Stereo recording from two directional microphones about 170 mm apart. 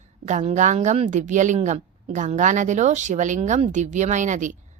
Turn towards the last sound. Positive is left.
turn(degrees=-45)  # may be behind; listen again after turning